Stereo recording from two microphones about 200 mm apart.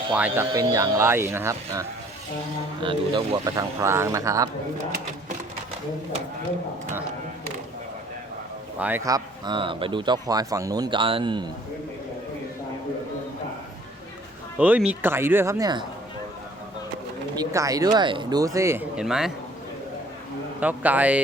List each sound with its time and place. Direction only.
0.2 s speech: 15° right (ahead or behind)
2.8 s speech: 25° right (ahead or behind)
8.8 s speech: 10° right (ahead or behind)
14.6 s speech: 5° right (ahead or behind)
17.3 s speech: 15° right (ahead or behind)
20.6 s speech: 5° right (ahead or behind)